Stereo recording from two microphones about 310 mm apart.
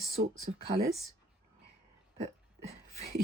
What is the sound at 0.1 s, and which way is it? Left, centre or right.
Speech, right.